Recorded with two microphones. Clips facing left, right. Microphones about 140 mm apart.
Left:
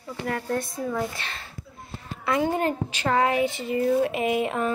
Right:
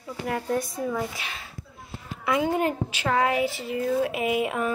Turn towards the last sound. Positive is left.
turn(degrees=-5)  # may be behind; listen again after turning